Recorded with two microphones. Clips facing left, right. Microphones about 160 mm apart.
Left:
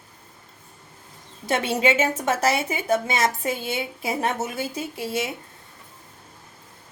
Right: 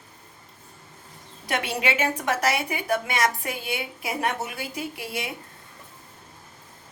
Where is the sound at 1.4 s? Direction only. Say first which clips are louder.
Left 5 dB; 25° left (ahead or behind).